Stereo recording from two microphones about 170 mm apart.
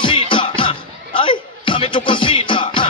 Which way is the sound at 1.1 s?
30° left (ahead or behind).